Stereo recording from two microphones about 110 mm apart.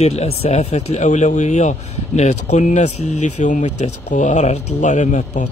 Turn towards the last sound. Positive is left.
turn(degrees=90)